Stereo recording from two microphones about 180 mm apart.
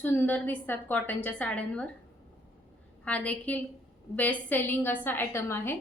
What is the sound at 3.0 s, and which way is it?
A woman's voice, 5° left (ahead or behind).